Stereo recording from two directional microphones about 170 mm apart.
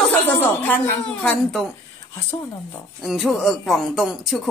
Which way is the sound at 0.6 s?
5° left (ahead or behind).